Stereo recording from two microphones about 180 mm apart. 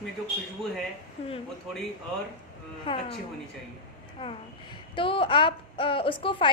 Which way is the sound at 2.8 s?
30° left (ahead or behind).